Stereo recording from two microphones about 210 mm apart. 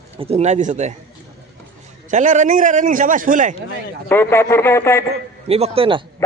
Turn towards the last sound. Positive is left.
turn(degrees=-25)  # may be behind; listen again after turning